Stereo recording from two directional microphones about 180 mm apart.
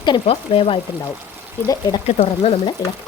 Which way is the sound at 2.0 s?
35° left (ahead or behind).